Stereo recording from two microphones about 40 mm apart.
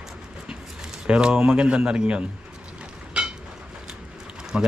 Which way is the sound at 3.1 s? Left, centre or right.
Right.